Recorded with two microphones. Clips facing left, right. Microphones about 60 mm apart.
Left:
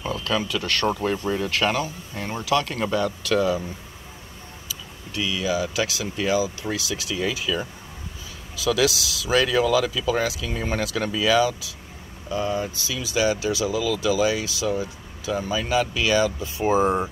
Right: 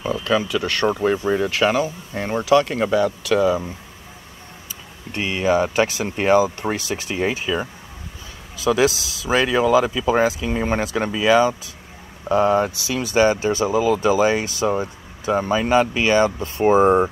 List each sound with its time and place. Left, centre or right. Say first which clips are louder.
0.0 s speech: right 5 dB; centre
2.1 s speech: right 7 dB; right
4.6 s vehicle: right 1 dB; right
5.9 s speech: right 7 dB; right
7.1 s speech: right 4 dB; right
8.6 s speech: right 4 dB; right
12.3 s speech: right 9 dB; right
12.8 s speech: right 2 dB; right